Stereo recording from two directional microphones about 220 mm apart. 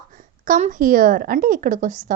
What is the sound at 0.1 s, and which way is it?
A child's voice, 35° right (ahead or behind).